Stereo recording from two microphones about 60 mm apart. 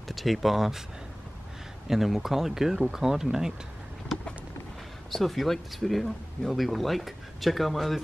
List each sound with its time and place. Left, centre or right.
0.1 s speech: centre
1.9 s speech: centre
5.1 s speech: centre